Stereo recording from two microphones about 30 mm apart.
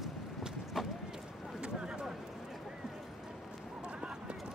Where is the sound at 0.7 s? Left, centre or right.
Centre.